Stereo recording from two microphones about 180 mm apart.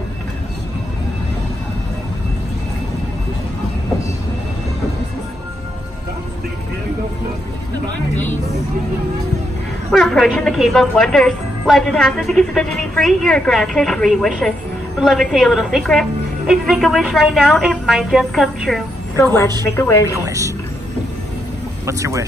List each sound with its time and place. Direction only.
9.8 s speech: centre (ahead or behind)
19.6 s a woman's voice: 15° left (ahead or behind)
20.1 s a woman's voice: 15° right (ahead or behind)
21.8 s a woman's voice: 15° right (ahead or behind)